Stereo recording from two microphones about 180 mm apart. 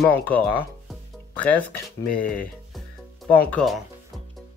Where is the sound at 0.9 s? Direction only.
10° left (ahead or behind).